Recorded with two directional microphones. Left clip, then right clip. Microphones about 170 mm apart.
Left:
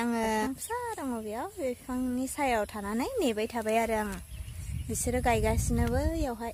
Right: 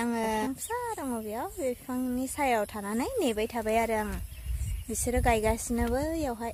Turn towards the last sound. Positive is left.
turn(degrees=-5)  # may be behind; listen again after turning